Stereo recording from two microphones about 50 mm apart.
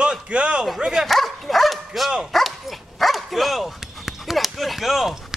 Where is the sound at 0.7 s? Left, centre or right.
Centre.